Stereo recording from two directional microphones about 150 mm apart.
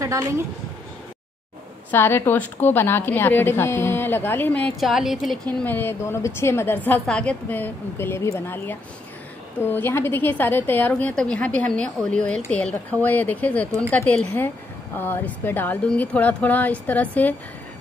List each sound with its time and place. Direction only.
0.0 s speech: 20° right (ahead or behind)
1.9 s a woman's voice: 15° left (ahead or behind)
4.7 s a woman's voice: centre (ahead or behind)
5.6 s a woman's voice: 15° left (ahead or behind)